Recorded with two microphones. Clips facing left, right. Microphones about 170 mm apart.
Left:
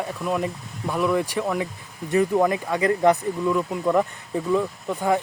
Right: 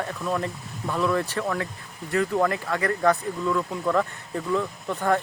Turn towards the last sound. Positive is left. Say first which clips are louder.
# left 1 dB
turn(degrees=10)  # may be behind; listen again after turning